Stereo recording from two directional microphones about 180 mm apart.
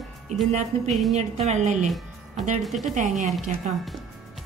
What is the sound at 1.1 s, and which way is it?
A woman's voice, 40° right (ahead or behind).